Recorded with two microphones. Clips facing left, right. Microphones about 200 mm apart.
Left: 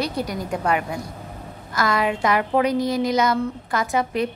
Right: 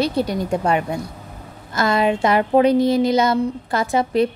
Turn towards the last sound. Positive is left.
turn(degrees=-30)  # may be behind; listen again after turning